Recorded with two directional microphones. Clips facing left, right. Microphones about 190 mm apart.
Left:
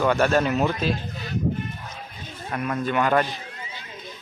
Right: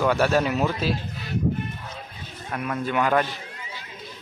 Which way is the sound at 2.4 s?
Centre (ahead or behind).